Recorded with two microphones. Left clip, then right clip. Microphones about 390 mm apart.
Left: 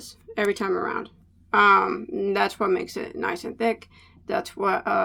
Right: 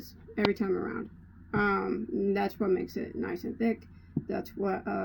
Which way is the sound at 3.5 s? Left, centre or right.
Left.